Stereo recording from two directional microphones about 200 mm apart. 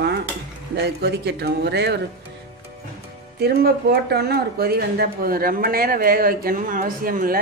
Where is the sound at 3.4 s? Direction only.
50° right (ahead or behind).